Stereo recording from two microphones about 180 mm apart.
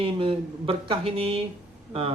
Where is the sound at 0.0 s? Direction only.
30° right (ahead or behind).